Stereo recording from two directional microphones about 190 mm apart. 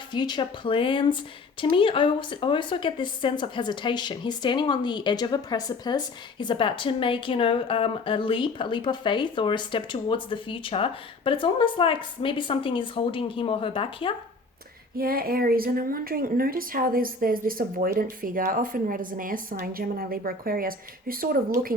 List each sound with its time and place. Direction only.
0.1 s a woman's voice: 25° left (ahead or behind)
14.9 s a woman's voice: 50° right (ahead or behind)